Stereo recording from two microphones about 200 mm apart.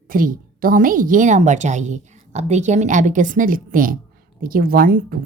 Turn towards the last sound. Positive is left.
turn(degrees=-45)  # may be behind; listen again after turning